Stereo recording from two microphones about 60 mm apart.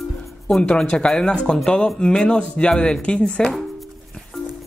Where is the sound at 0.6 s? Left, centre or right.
Centre.